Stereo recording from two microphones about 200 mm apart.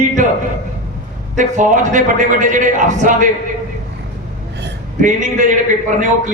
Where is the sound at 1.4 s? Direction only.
40° right (ahead or behind).